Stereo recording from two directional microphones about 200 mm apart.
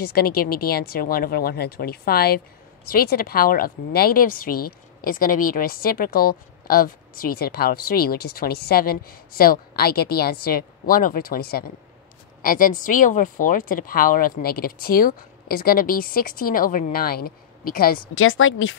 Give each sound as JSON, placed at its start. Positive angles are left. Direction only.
{"t": 0.0, "sound": "speech", "side_deg": 50}
{"t": 18.1, "sound": "speech", "side_deg": 90}